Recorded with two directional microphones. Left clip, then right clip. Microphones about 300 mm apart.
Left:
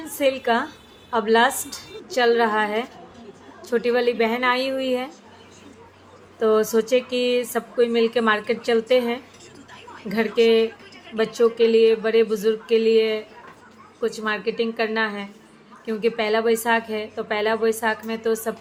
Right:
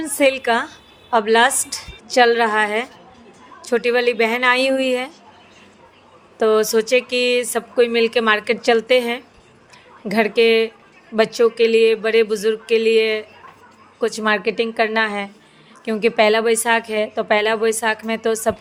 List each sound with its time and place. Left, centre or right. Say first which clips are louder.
0.0 s speech: right 5 dB; right
6.4 s speech: right 3 dB; right